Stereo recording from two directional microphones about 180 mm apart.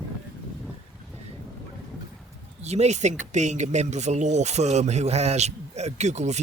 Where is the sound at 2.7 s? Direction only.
40° right (ahead or behind).